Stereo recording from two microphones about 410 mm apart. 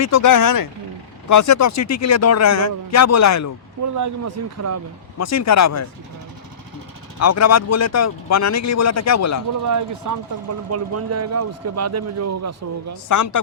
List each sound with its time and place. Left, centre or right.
0.0 s speech: left
3.9 s speech: right
5.1 s speech: left
7.2 s speech: left
9.6 s speech: right
13.1 s speech: left